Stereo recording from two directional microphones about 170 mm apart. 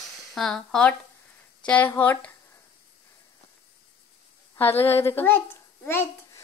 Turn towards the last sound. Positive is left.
turn(degrees=15)  # may be behind; listen again after turning